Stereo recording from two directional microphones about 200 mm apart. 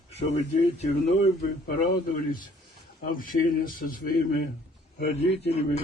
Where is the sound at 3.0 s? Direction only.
45° left (ahead or behind).